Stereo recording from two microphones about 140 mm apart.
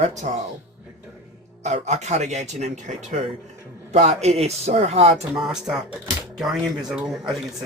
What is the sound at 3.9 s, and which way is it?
Speech, 50° right (ahead or behind).